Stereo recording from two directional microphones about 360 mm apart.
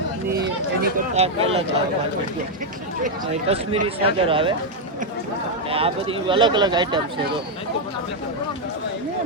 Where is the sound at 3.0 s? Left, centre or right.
Centre.